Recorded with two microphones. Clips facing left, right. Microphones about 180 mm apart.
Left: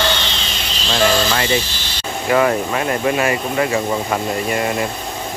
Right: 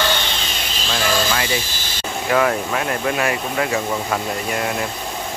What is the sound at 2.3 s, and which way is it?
Speech, centre (ahead or behind).